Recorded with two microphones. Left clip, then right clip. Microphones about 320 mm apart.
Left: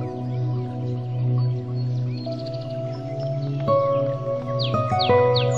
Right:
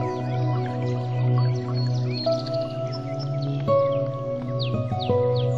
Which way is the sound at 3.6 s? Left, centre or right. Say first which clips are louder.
Left 1 dB; centre.